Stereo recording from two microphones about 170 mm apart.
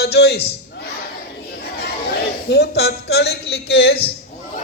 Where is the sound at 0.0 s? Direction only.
75° left (ahead or behind).